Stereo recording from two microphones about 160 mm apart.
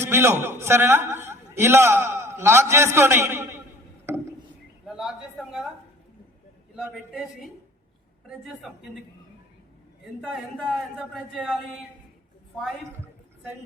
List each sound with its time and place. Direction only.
0.0 s a man's voice: 15° right (ahead or behind)
4.0 s a sound: 15° right (ahead or behind)
4.9 s speech: centre (ahead or behind)
6.9 s speech: centre (ahead or behind)
10.2 s speech: centre (ahead or behind)